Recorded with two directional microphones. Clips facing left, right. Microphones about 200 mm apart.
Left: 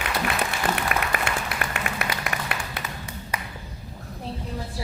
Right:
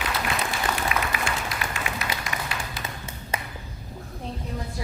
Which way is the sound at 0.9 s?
60° left (ahead or behind).